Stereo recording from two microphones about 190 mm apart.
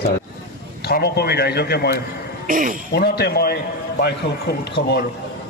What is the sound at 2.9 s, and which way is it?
A man's voice, 55° left (ahead or behind).